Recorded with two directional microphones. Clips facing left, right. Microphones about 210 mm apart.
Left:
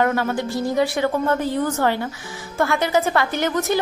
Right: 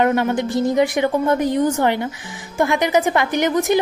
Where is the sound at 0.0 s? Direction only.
20° right (ahead or behind).